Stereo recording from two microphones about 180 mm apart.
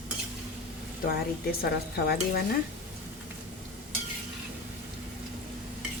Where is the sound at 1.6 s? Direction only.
60° left (ahead or behind).